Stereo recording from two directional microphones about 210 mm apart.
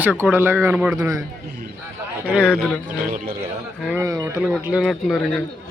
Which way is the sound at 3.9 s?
15° right (ahead or behind).